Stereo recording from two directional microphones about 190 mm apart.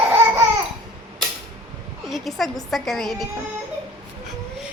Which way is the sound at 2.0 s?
Centre (ahead or behind).